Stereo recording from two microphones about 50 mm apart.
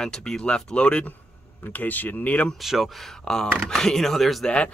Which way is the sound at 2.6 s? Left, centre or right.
Centre.